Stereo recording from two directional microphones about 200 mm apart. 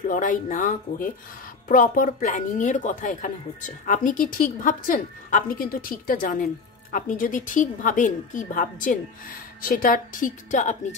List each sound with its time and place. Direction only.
0.1 s a woman's voice: 40° left (ahead or behind)